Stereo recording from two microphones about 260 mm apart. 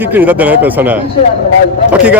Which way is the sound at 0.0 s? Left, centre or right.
Centre.